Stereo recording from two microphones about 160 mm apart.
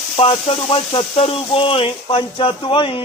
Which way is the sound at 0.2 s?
35° left (ahead or behind).